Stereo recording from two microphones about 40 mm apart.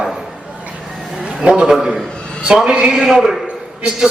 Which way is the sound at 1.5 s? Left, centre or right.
Right.